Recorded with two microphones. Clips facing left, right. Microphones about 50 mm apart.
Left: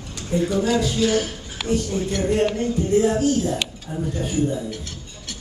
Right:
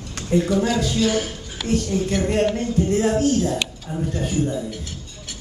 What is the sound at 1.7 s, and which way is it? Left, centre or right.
Speech, centre.